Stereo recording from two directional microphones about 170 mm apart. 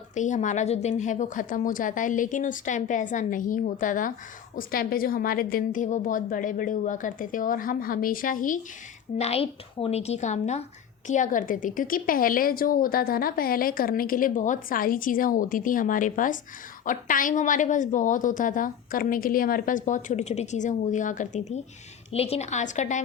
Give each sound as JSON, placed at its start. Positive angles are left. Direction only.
{"t": 0.1, "sound": "speech", "side_deg": 45}
{"t": 9.1, "sound": "speech", "side_deg": 35}